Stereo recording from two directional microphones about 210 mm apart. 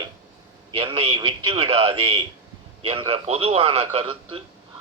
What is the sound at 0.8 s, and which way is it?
A man's voice, 25° right (ahead or behind).